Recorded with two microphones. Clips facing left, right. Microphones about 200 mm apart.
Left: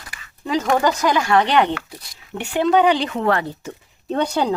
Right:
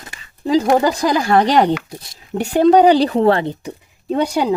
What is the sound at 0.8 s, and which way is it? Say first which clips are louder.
Speech: right 2 dB; 30° right (ahead or behind).